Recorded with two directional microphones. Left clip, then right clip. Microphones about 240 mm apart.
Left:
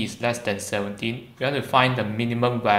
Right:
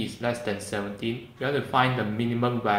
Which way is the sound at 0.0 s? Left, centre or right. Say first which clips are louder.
Left 4 dB; left.